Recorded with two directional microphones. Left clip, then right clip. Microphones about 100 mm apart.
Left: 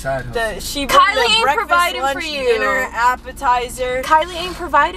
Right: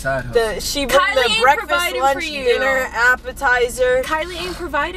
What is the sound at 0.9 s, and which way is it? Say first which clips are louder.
A woman's voice: left 3 dB; 15° left (ahead or behind).